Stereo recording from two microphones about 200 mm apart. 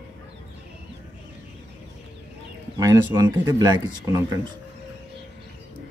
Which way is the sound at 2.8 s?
20° right (ahead or behind).